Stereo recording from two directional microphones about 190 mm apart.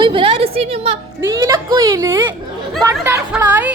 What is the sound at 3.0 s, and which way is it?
Speech, 10° right (ahead or behind).